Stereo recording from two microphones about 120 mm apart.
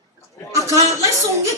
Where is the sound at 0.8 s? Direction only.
25° right (ahead or behind).